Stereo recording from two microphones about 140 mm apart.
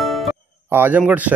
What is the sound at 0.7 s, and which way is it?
Speech, 15° right (ahead or behind).